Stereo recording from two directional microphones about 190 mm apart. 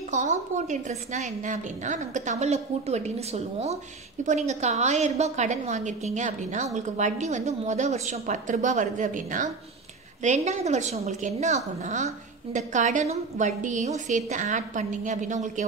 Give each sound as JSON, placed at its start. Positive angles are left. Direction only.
{"t": 0.1, "sound": "a woman's voice", "side_deg": -40}